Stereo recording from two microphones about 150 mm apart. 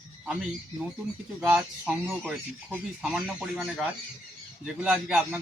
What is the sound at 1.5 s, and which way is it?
Speech, 5° right (ahead or behind).